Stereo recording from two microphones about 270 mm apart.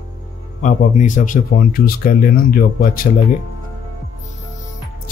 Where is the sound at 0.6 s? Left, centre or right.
Left.